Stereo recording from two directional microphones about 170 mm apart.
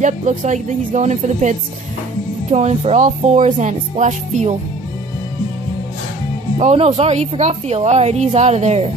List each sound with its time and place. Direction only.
0.0 s a woman's voice: 45° right (ahead or behind)
6.6 s a woman's voice: 40° right (ahead or behind)